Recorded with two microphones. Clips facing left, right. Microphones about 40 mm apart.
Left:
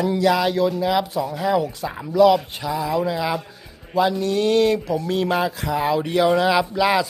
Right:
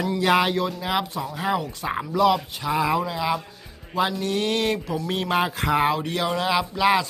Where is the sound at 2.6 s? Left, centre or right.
Centre.